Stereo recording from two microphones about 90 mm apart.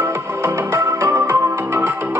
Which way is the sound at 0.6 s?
40° right (ahead or behind).